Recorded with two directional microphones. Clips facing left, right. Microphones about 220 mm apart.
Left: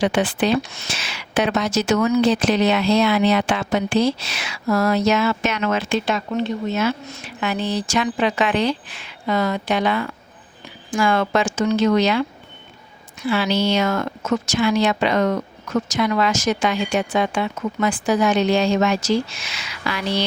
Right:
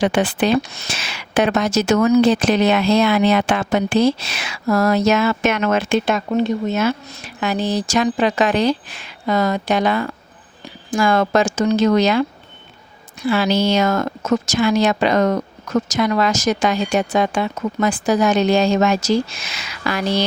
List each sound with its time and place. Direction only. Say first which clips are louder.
0.0 s speech: right 2 dB; 45° right (ahead or behind)
13.2 s speech: right 3 dB; 40° right (ahead or behind)